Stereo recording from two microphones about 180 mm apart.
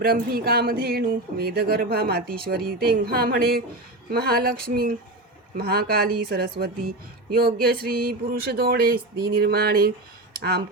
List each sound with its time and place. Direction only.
0.0 s speech: 55° right (ahead or behind)